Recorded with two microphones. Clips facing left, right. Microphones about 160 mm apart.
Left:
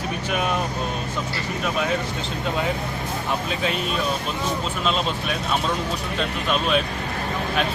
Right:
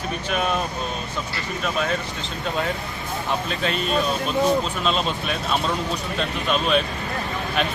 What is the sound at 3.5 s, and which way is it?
Speech, 5° left (ahead or behind).